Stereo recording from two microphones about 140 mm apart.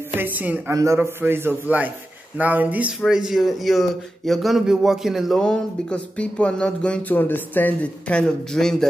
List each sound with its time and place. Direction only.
0.1 s a man's voice: 15° right (ahead or behind); by 8.8 s 5° left (ahead or behind)